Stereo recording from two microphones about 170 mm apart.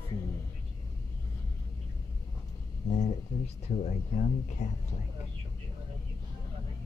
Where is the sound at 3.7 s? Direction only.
40° left (ahead or behind).